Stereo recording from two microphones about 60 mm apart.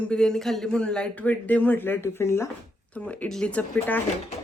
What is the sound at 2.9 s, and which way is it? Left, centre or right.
Speech, left.